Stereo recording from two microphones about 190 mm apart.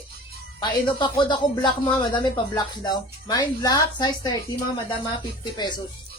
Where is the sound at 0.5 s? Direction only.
25° left (ahead or behind).